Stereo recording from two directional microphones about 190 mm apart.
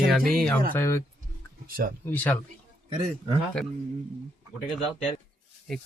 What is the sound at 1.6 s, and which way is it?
Speech, 50° right (ahead or behind).